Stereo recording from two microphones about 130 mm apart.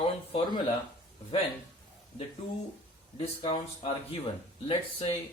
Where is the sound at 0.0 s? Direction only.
40° left (ahead or behind).